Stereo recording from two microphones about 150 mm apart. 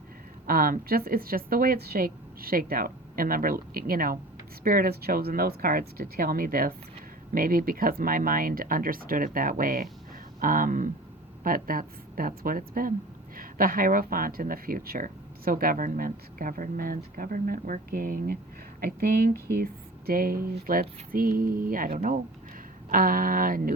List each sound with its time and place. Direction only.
0.4 s speech: 75° right (ahead or behind)